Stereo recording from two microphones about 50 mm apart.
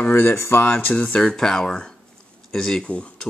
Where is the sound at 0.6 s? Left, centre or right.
Left.